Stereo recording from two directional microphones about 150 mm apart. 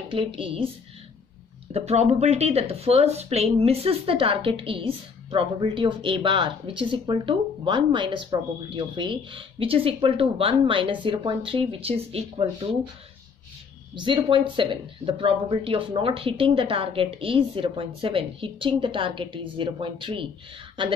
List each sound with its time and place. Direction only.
0.1 s speech: 35° right (ahead or behind)
1.7 s speech: 45° right (ahead or behind)
13.9 s speech: 30° right (ahead or behind)